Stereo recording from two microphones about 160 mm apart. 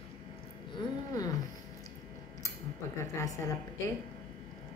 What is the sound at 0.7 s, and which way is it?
Speech, 25° left (ahead or behind).